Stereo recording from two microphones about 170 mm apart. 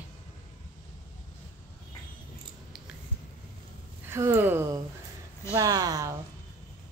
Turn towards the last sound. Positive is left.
turn(degrees=-20)  # may be behind; listen again after turning